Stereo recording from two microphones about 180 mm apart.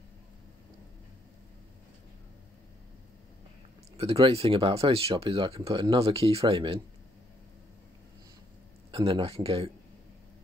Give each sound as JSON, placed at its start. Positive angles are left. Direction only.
{"t": 3.9, "sound": "speech", "side_deg": -35}
{"t": 8.9, "sound": "speech", "side_deg": -30}